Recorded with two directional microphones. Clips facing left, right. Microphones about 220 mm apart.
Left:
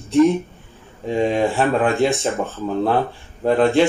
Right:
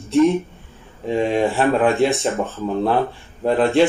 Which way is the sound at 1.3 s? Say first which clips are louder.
Right 1 dB; centre (ahead or behind).